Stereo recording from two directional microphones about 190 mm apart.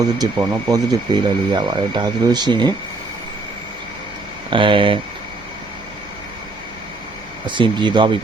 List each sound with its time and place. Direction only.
0.2 s speech: 20° right (ahead or behind)
4.5 s speech: 25° right (ahead or behind)
7.4 s speech: 25° right (ahead or behind)